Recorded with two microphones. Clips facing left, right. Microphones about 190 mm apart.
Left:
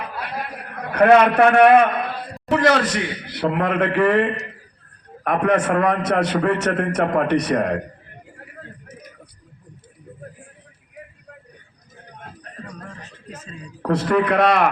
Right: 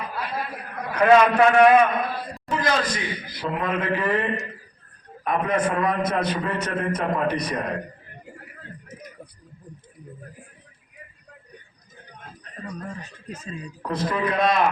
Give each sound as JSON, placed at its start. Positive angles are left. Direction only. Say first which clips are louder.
{"t": 0.9, "sound": "a man's voice", "louder": "left 3 dB", "side_deg": 60}
{"t": 13.8, "sound": "a man's voice", "louder": "left 7 dB", "side_deg": 70}